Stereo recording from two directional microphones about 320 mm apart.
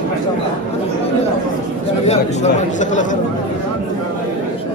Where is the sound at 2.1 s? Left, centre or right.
Left.